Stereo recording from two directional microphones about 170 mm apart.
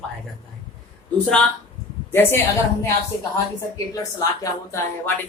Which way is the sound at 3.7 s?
20° left (ahead or behind).